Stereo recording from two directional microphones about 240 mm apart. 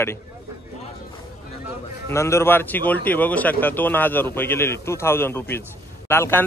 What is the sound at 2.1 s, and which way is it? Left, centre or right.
A man's voice, centre.